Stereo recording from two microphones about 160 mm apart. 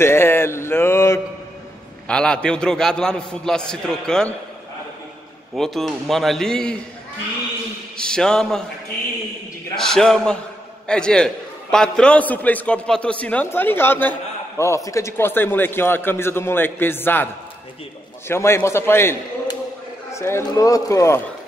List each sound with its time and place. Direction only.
0.0 s mantra: 15° left (ahead or behind)
2.0 s a man's voice: 5° left (ahead or behind)
5.6 s a man's voice: centre (ahead or behind)
8.0 s a man's voice: 5° left (ahead or behind)
9.8 s a man's voice: 5° left (ahead or behind)
18.3 s a man's voice: 15° left (ahead or behind)